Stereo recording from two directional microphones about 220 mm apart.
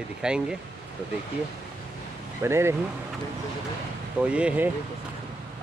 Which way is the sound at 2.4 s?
10° right (ahead or behind).